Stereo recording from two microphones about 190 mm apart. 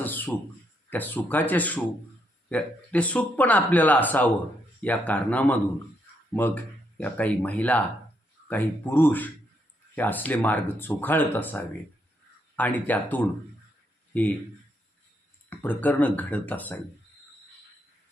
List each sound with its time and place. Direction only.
0.0 s a sound: 10° left (ahead or behind)
0.9 s speech: 10° left (ahead or behind)
15.4 s speech: 10° left (ahead or behind)